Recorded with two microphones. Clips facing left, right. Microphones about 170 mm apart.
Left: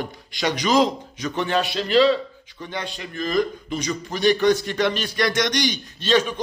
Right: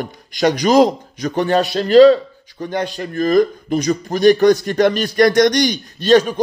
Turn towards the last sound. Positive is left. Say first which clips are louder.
# right 8 dB
turn(degrees=-45)  # may be behind; listen again after turning